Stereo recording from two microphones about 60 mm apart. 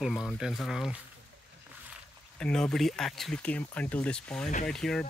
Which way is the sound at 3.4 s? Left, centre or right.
Left.